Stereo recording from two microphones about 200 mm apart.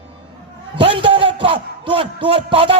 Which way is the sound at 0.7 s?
25° right (ahead or behind).